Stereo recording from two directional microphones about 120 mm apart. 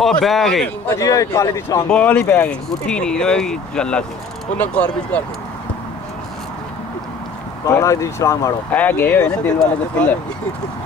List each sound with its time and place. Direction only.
0.0 s a man's voice: centre (ahead or behind)
0.8 s a man's voice: 25° left (ahead or behind)
1.9 s speech: 10° left (ahead or behind)
7.6 s a man's voice: 25° left (ahead or behind)
8.7 s speech: 15° left (ahead or behind)